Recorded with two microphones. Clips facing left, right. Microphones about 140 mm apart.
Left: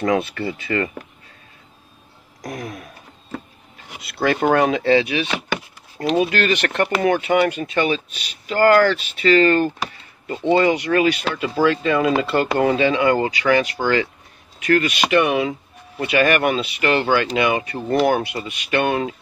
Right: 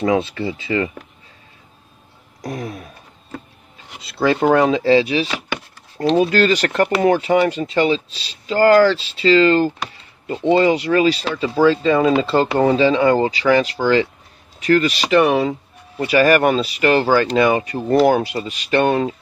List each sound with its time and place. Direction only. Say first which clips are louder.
0.0 s speech: right 2 dB; 25° right (ahead or behind)
2.4 s speech: right 3 dB; 30° right (ahead or behind)
4.0 s speech: right 3 dB; 25° right (ahead or behind)
6.3 s speech: right 4 dB; 35° right (ahead or behind)